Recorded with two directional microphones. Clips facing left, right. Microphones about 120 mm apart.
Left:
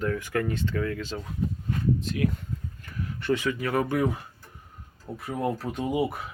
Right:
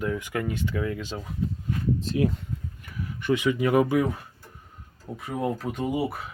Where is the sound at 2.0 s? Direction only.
30° right (ahead or behind).